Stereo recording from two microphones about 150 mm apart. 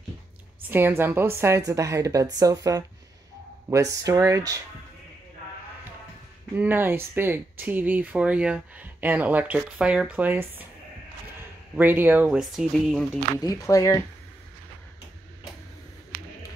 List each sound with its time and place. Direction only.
0.7 s a woman's voice: 15° right (ahead or behind)
6.5 s speech: 15° right (ahead or behind)
11.8 s speech: 10° right (ahead or behind)
13.4 s speech: 25° left (ahead or behind)